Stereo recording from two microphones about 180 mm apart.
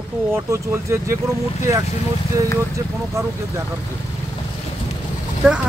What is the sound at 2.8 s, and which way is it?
Speech, 15° right (ahead or behind).